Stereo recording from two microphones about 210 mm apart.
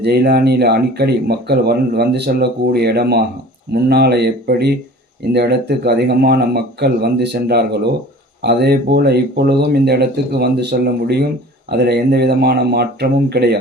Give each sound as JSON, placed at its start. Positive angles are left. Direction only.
{"t": 0.0, "sound": "speech", "side_deg": -50}